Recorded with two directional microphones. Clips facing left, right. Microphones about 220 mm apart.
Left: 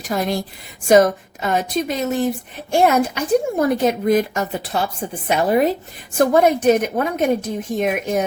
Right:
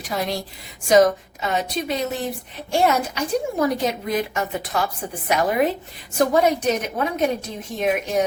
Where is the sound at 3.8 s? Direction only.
45° left (ahead or behind).